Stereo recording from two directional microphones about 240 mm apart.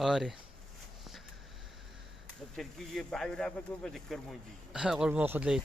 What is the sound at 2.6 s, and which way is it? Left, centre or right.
Speech, centre.